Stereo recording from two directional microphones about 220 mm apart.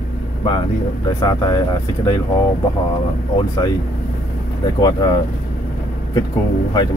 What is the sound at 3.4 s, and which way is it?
Speech, 20° left (ahead or behind).